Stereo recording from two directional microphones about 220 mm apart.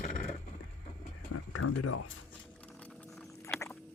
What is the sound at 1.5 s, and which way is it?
Speech, 90° left.